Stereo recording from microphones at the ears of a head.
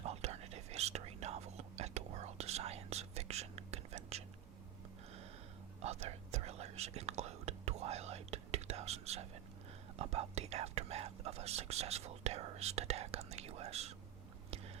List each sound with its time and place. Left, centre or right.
0.0 s whispering: right
5.8 s whispering: right